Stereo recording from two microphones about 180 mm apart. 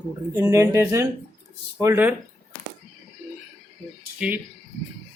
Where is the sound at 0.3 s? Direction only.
15° right (ahead or behind).